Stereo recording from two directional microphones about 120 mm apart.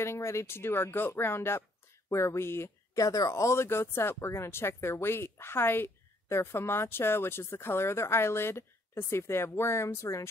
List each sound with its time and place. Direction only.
0.0 s speech: 20° left (ahead or behind)